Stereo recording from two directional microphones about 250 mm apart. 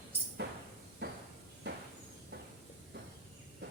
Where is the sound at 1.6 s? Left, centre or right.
Right.